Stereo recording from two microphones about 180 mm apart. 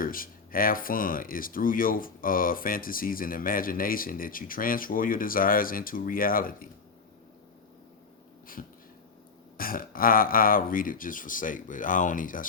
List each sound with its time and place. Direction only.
0.0 s speech: 50° left (ahead or behind)
8.6 s speech: 45° left (ahead or behind)